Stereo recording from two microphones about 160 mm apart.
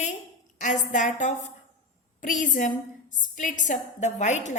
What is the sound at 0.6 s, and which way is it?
A woman's voice, 50° left (ahead or behind).